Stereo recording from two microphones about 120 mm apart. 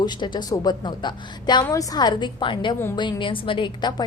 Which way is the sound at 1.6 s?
30° left (ahead or behind).